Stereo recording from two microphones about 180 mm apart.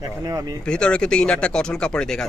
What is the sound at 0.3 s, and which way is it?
Speech, 20° right (ahead or behind).